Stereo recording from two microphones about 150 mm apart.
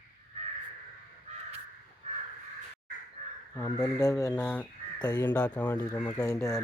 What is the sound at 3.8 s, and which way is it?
Speech, 20° left (ahead or behind).